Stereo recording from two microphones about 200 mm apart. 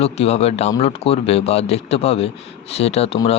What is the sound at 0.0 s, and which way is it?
Speech, 30° left (ahead or behind).